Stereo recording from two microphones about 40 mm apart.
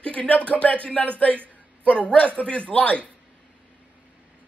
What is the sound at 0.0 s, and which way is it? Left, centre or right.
Speech, left.